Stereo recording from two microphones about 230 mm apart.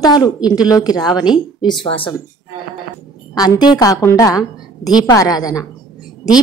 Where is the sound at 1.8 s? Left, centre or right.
Left.